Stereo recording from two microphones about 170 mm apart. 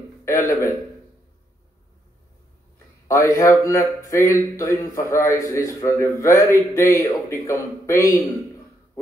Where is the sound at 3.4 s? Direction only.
15° left (ahead or behind).